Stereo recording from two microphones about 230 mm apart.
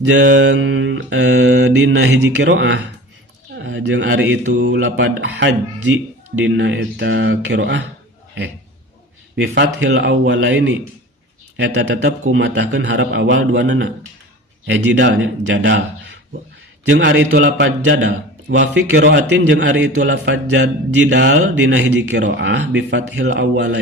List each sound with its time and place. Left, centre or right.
0.0 s speech: right
9.3 s speech: right